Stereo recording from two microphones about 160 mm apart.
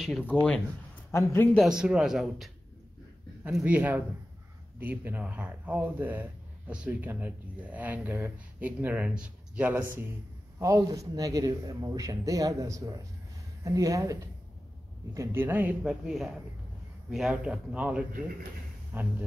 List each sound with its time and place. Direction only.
0.0 s speech: centre (ahead or behind)
1.1 s a man's voice: 15° left (ahead or behind)
1.6 s speech: 5° right (ahead or behind)
10.6 s speech: 20° right (ahead or behind)
15.1 s speech: 15° right (ahead or behind)